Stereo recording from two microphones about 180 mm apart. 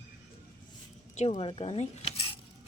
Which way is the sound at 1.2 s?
30° left (ahead or behind).